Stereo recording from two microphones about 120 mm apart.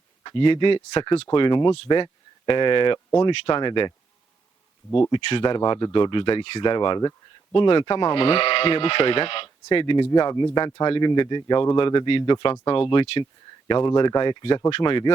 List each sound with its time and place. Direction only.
0.2 s speech: 40° left (ahead or behind)
1.3 s speech: 40° left (ahead or behind)
5.1 s speech: 40° left (ahead or behind)